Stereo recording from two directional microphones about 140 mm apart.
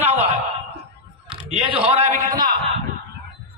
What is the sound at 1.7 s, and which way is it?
Speech, 45° right (ahead or behind).